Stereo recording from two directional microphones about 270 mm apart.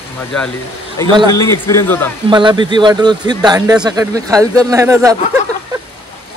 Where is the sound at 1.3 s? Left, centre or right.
Centre.